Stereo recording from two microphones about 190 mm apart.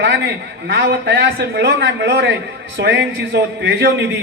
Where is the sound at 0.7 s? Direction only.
60° right (ahead or behind).